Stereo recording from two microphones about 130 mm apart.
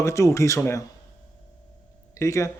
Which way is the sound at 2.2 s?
25° left (ahead or behind).